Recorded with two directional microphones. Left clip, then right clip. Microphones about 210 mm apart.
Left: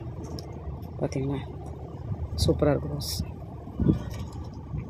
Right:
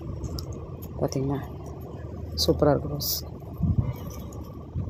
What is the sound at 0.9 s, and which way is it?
Speech, 5° right (ahead or behind).